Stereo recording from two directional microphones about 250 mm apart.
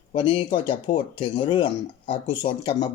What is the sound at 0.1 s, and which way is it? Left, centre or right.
Speech, left.